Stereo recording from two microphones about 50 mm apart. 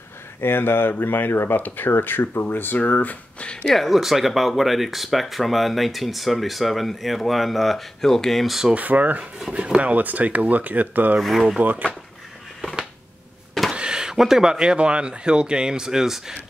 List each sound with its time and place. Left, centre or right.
0.4 s speech: left
3.7 s speech: centre
8.7 s speech: right
11.1 s speech: centre
13.7 s speech: centre